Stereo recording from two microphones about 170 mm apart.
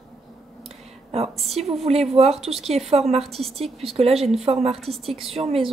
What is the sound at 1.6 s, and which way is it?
Speech, 40° right (ahead or behind).